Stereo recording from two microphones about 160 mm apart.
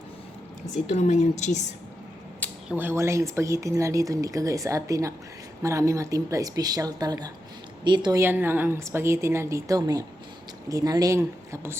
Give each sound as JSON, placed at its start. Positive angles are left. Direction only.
{"t": 0.9, "sound": "a woman's voice", "side_deg": 45}
{"t": 2.6, "sound": "speech", "side_deg": -10}
{"t": 8.2, "sound": "a woman's voice", "side_deg": -15}